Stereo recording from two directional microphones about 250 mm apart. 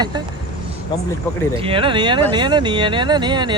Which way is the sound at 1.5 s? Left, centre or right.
Right.